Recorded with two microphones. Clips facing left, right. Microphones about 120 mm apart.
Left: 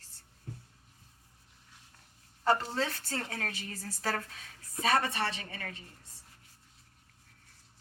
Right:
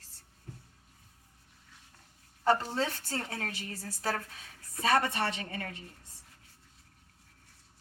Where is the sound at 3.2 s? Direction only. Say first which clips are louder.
Even; 25° right (ahead or behind).